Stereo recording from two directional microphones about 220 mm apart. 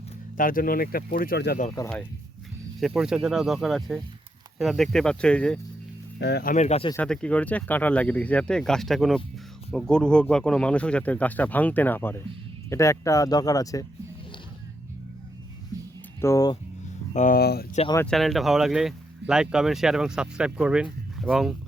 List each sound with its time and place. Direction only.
0.3 s speech: 40° left (ahead or behind)
2.8 s speech: centre (ahead or behind)
6.1 s speech: 50° left (ahead or behind); by 6.9 s 25° left (ahead or behind)
6.9 s speech: 5° left (ahead or behind)
16.2 s speech: 15° left (ahead or behind)
17.2 s speech: 40° left (ahead or behind)
17.9 s speech: 5° left (ahead or behind)